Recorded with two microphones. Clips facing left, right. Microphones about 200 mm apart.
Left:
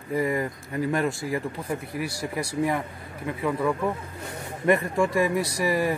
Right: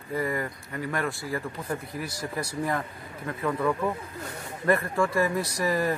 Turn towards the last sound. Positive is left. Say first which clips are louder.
# left 2 dB
turn(degrees=10)  # may be behind; listen again after turning